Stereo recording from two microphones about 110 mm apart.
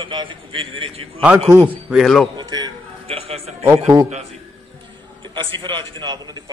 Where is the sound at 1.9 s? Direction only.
Centre (ahead or behind).